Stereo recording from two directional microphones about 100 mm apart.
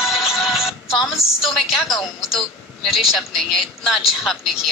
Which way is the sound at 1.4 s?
Centre (ahead or behind).